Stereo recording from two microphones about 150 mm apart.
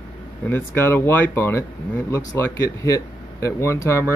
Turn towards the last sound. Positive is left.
turn(degrees=20)  # may be behind; listen again after turning